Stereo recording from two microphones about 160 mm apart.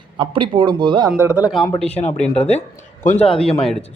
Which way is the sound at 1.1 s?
15° right (ahead or behind).